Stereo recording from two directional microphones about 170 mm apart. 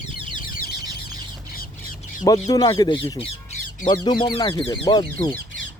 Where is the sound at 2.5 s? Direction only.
25° left (ahead or behind).